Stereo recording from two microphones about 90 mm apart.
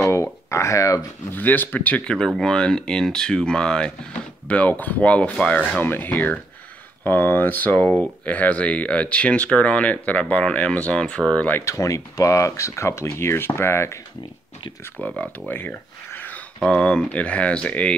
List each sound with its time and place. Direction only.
0.0 s a sound: 35° left (ahead or behind)
1.3 s speech: 20° left (ahead or behind)
11.6 s speech: 35° left (ahead or behind)
15.0 s speech: 15° left (ahead or behind)
16.5 s speech: 10° left (ahead or behind)